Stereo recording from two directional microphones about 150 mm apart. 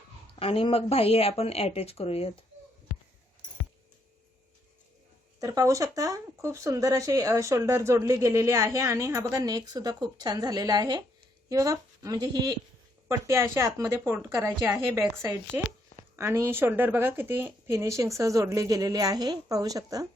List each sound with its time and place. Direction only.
0.3 s speech: 40° left (ahead or behind)
5.4 s speech: 20° right (ahead or behind)
13.1 s speech: 20° right (ahead or behind)
14.9 s speech: 20° right (ahead or behind)